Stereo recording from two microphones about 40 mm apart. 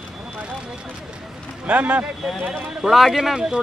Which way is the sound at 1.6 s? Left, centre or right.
Right.